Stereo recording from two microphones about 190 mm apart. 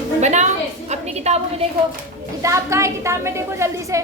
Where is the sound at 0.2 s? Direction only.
40° right (ahead or behind).